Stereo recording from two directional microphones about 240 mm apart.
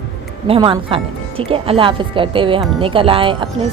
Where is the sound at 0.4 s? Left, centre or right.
Right.